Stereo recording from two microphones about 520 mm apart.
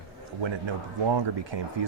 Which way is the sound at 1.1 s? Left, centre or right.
Right.